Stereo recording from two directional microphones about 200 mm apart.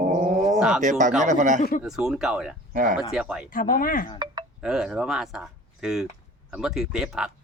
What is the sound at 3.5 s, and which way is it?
Speech, 45° left (ahead or behind).